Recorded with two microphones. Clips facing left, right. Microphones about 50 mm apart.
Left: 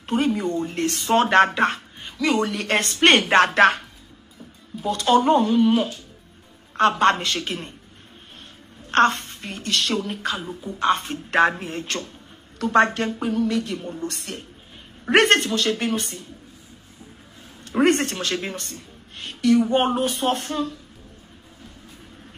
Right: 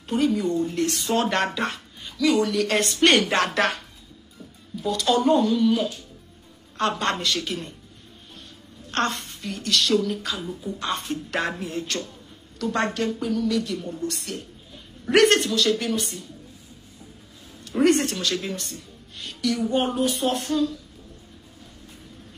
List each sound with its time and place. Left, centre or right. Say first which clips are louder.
0.0 s speech: even; left
8.9 s speech: left 7 dB; left
17.6 s speech: left 1 dB; left